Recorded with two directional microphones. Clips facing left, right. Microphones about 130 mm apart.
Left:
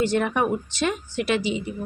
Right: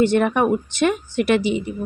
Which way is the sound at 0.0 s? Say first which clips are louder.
Right 5 dB; 60° right (ahead or behind).